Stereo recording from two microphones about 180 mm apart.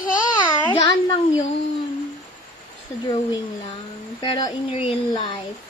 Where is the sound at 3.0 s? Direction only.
20° left (ahead or behind).